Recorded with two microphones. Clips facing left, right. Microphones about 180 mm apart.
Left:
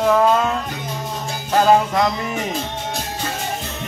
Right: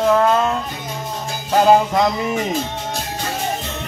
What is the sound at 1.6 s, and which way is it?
Music, 10° right (ahead or behind).